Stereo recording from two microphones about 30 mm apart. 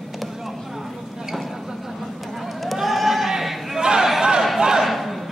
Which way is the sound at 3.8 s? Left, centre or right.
Right.